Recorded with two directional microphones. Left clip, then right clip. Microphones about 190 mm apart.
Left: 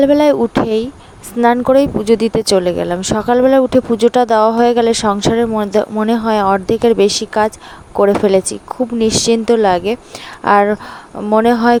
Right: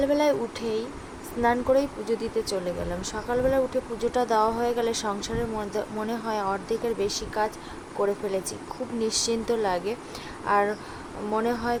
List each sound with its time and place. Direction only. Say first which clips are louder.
0.0 s speech: left 13 dB; 45° left (ahead or behind)